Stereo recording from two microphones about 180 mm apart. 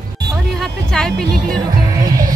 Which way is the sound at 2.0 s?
20° right (ahead or behind).